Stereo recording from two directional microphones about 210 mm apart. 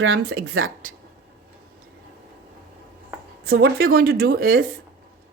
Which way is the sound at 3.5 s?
45° right (ahead or behind).